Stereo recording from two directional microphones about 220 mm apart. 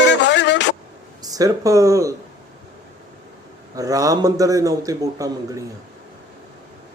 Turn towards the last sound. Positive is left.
turn(degrees=-15)  # may be behind; listen again after turning